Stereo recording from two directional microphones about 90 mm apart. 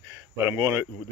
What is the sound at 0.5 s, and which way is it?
Speech, 35° right (ahead or behind).